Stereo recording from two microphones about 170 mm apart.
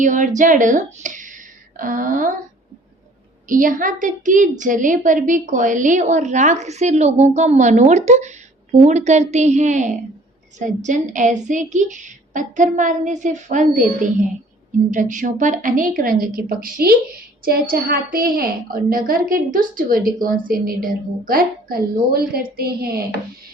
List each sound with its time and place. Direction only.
0.0 s a woman's voice: 50° right (ahead or behind)
3.5 s a woman's voice: 50° right (ahead or behind)
14.8 s a woman's voice: 50° right (ahead or behind); by 23.0 s 65° right (ahead or behind)